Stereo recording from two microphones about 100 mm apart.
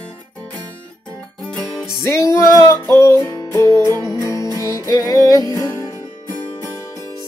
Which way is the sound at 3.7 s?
45° right (ahead or behind).